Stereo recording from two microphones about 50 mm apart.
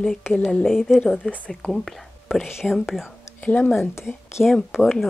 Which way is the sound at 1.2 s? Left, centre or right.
Centre.